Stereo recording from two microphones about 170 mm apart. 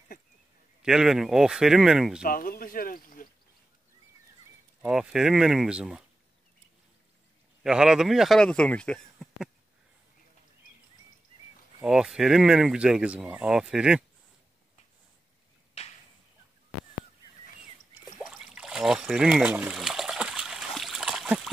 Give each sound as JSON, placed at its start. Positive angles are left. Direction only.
{"t": 0.8, "sound": "speech", "side_deg": -5}
{"t": 2.2, "sound": "speech", "side_deg": 55}
{"t": 4.8, "sound": "speech", "side_deg": -5}
{"t": 7.6, "sound": "speech", "side_deg": -5}
{"t": 11.8, "sound": "speech", "side_deg": -5}
{"t": 15.8, "sound": "a sound", "side_deg": 40}
{"t": 18.2, "sound": "water", "side_deg": 0}